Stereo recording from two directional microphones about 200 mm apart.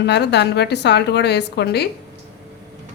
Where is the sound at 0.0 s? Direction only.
55° left (ahead or behind).